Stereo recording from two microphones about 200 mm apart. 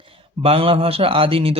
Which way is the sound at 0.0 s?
30° right (ahead or behind).